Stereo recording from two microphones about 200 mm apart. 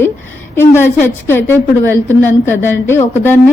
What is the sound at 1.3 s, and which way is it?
Speech, 10° left (ahead or behind).